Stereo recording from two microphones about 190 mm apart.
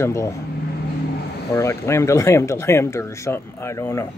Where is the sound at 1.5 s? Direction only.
15° left (ahead or behind).